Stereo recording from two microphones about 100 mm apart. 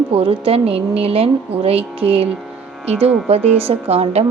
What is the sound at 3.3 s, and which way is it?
Speech, 85° right.